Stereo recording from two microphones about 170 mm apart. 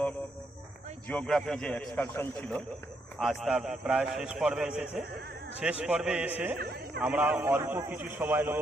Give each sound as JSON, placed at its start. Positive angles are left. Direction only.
{"t": 1.0, "sound": "a man's voice", "side_deg": 10}
{"t": 3.2, "sound": "a man's voice", "side_deg": 0}
{"t": 6.6, "sound": "a sound", "side_deg": -70}
{"t": 7.0, "sound": "a man's voice", "side_deg": -10}